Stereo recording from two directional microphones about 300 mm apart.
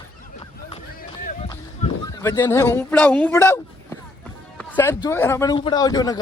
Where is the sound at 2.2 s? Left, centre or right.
Centre.